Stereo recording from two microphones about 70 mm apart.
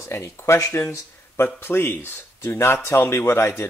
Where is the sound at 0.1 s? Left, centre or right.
Left.